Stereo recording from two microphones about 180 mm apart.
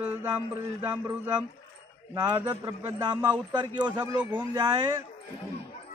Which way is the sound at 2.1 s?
20° right (ahead or behind).